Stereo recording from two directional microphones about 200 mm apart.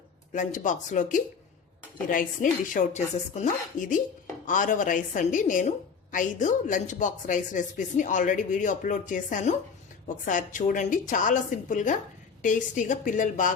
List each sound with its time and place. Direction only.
0.3 s a woman's voice: 40° left (ahead or behind)